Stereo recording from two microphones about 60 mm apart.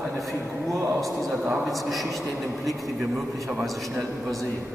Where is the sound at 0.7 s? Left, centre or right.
Right.